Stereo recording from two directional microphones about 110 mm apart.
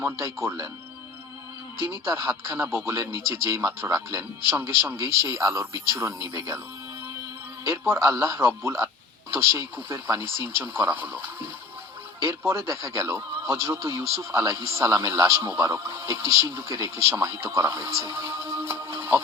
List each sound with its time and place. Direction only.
0.0 s speech: 25° right (ahead or behind)
2.6 s speech: 25° right (ahead or behind)
7.7 s speech: 25° right (ahead or behind)
12.5 s speech: 25° right (ahead or behind)